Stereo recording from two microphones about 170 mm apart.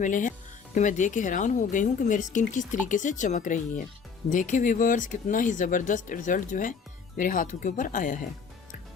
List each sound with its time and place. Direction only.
0.0 s speech: 50° left (ahead or behind)